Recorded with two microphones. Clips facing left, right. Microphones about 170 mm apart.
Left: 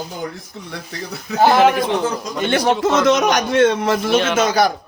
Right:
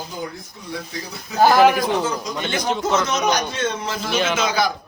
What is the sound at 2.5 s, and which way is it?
A man's voice, 70° left (ahead or behind).